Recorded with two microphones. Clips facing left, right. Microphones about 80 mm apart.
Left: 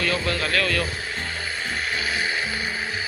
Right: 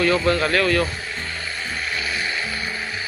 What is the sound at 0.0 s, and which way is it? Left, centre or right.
Speech, right.